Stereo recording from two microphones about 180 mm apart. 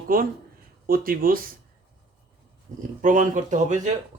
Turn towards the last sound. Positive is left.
turn(degrees=-40)  # may be behind; listen again after turning